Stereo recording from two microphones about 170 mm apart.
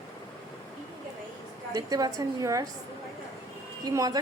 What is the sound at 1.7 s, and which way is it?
Speech, 20° right (ahead or behind).